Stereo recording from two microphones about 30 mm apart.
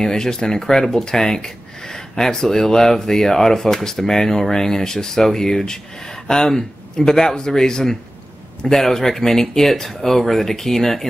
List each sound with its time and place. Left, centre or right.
0.0 s speech: left